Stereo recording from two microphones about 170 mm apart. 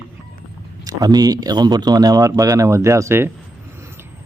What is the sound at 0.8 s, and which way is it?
A man's voice, 20° right (ahead or behind).